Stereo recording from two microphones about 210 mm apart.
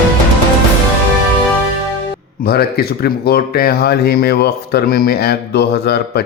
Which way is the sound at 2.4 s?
45° left (ahead or behind).